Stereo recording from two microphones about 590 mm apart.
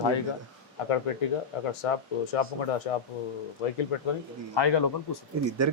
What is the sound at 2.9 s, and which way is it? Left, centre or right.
Speech, left.